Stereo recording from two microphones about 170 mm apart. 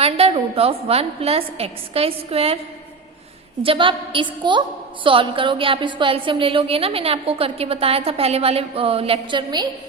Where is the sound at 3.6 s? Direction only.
30° right (ahead or behind).